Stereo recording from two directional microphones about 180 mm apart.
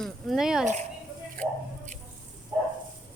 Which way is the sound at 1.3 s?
45° right (ahead or behind).